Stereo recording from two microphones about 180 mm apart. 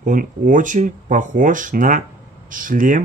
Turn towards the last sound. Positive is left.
turn(degrees=-50)  # may be behind; listen again after turning